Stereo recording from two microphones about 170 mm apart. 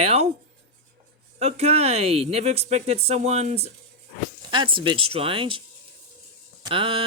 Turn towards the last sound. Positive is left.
turn(degrees=-30)  # may be behind; listen again after turning